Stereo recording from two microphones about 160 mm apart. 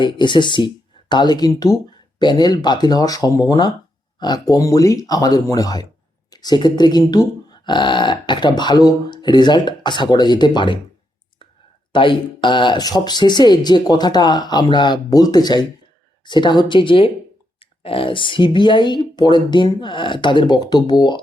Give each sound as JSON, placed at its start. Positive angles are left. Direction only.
{"t": 0.0, "sound": "speech", "side_deg": 30}
{"t": 11.9, "sound": "speech", "side_deg": 30}